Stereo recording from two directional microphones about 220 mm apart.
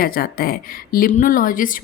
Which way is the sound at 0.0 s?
45° left (ahead or behind).